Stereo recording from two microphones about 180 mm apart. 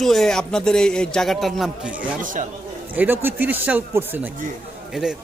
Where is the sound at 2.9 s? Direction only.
10° right (ahead or behind).